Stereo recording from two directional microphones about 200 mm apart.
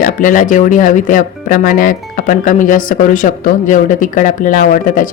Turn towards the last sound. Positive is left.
turn(degrees=40)  # may be behind; listen again after turning